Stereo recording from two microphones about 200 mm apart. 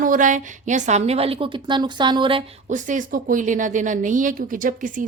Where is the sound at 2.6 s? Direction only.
40° right (ahead or behind).